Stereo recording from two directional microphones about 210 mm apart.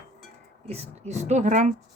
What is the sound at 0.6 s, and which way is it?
Speech, 30° right (ahead or behind).